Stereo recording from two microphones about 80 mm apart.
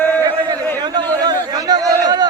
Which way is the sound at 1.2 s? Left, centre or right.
Right.